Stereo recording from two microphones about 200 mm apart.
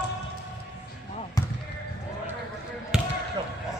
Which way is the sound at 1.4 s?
20° left (ahead or behind).